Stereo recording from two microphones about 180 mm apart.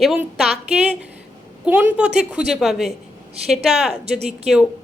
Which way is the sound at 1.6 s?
5° right (ahead or behind).